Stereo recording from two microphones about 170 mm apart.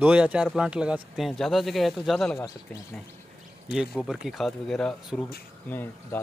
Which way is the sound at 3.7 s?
Centre (ahead or behind).